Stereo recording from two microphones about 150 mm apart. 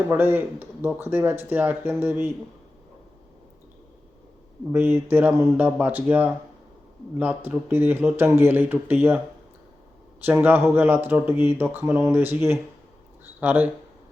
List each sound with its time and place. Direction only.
0.1 s speech: 15° right (ahead or behind)
4.7 s speech: 15° right (ahead or behind)
10.2 s speech: 10° right (ahead or behind)